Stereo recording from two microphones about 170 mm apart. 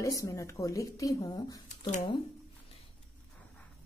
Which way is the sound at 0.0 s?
20° left (ahead or behind).